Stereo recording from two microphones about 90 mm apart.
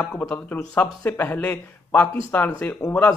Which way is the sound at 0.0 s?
20° left (ahead or behind).